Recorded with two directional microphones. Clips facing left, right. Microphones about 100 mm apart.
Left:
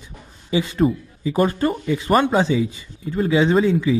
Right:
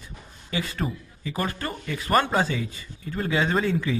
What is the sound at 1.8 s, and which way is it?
Speech, 15° left (ahead or behind).